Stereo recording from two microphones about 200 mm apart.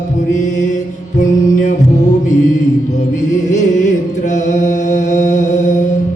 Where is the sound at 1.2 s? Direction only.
40° left (ahead or behind).